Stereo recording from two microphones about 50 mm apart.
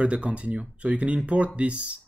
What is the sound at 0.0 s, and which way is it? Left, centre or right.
Speech, right.